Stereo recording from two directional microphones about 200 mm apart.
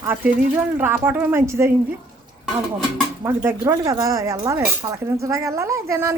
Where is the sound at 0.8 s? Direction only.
10° right (ahead or behind).